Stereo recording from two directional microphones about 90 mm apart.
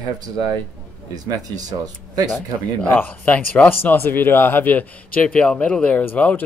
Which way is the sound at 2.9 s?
20° left (ahead or behind).